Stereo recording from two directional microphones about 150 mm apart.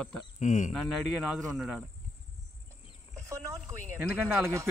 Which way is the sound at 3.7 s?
20° right (ahead or behind).